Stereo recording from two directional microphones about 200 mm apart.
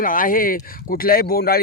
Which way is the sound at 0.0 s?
45° left (ahead or behind).